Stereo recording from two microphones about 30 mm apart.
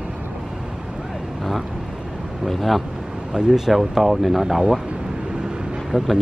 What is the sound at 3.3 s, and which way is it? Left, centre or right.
Speech, right.